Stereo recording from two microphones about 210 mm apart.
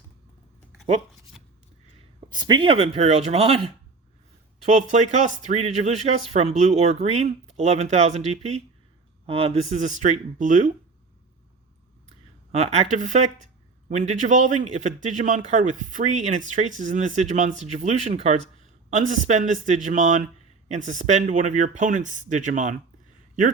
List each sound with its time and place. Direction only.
2.3 s a man's voice: 20° right (ahead or behind); by 10.7 s 35° right (ahead or behind)
12.5 s a man's voice: 30° right (ahead or behind)